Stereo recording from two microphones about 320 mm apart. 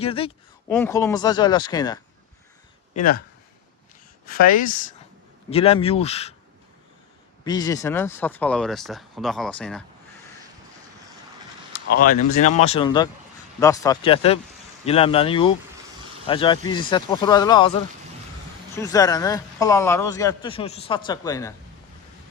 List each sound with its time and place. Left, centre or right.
0.0 s a man's voice: centre
2.9 s speech: left
4.3 s speech: left
7.4 s speech: centre
12.4 s a man's voice: left
18.7 s a man's voice: centre